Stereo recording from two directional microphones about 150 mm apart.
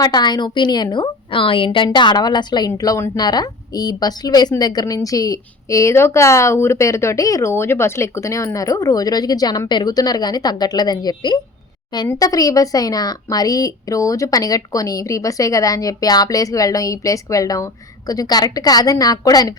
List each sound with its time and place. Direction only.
0.0 s a woman's voice: 30° left (ahead or behind)